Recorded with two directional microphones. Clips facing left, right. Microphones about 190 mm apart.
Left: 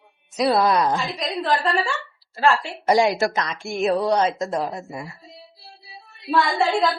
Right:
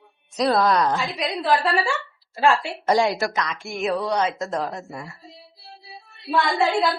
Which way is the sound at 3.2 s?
30° left (ahead or behind).